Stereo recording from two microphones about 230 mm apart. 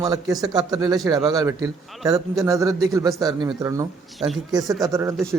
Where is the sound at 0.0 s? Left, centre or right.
Centre.